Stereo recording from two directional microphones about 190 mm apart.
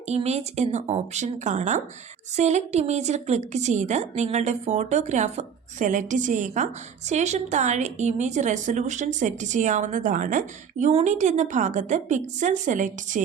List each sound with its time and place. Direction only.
0.1 s a woman's voice: 35° right (ahead or behind)